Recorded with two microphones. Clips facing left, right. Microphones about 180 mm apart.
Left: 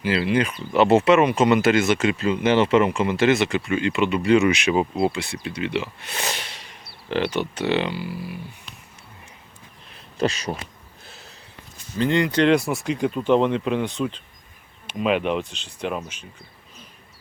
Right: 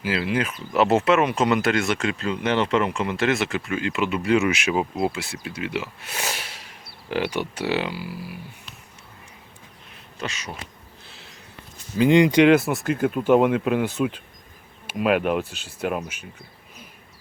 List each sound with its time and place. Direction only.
0.0 s speech: 5° right (ahead or behind)
10.2 s speech: 35° left (ahead or behind)
11.9 s speech: 15° right (ahead or behind)